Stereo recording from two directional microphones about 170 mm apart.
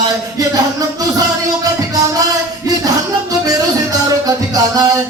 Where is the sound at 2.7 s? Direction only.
20° right (ahead or behind).